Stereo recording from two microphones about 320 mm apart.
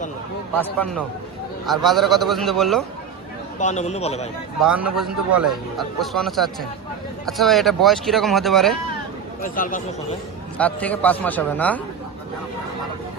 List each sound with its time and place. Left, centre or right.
0.5 s speech: centre
3.6 s speech: left
4.9 s speech: centre
9.4 s speech: left
10.6 s speech: centre